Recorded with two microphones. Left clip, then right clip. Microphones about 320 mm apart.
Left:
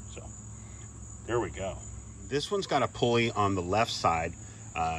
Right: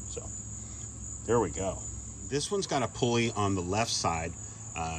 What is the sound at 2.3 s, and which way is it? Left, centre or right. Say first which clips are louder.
Speech: left 1 dB; centre.